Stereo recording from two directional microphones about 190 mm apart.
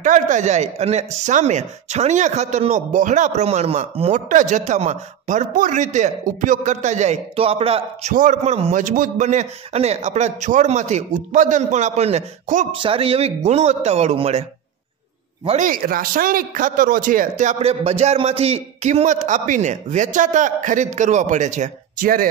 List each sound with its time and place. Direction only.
0.0 s speech: 40° right (ahead or behind)
8.1 s speech: 40° right (ahead or behind)
15.4 s speech: 40° right (ahead or behind)